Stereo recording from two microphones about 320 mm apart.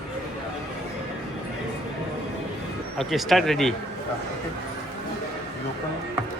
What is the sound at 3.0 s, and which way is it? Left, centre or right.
Speech, centre.